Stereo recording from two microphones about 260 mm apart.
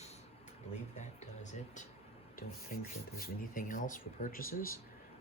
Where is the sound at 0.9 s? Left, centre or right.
Left.